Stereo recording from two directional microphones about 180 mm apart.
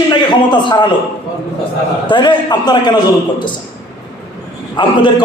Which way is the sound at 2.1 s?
25° left (ahead or behind).